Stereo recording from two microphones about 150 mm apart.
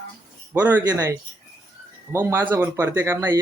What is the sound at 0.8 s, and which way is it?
Speech, 25° right (ahead or behind).